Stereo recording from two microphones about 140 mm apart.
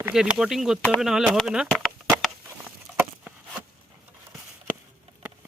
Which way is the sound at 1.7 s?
5° left (ahead or behind).